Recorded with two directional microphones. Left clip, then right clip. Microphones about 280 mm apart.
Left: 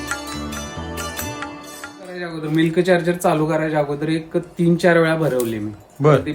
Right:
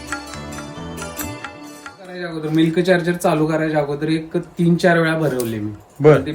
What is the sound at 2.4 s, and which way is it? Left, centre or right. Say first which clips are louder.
A man's voice: right 1 dB; centre.